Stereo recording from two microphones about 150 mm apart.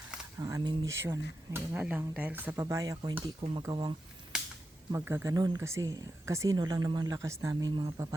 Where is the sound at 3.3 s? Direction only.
35° right (ahead or behind).